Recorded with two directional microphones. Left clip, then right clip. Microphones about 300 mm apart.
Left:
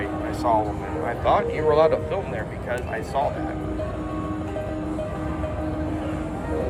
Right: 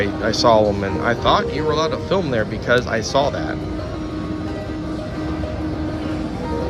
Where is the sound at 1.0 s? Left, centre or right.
Centre.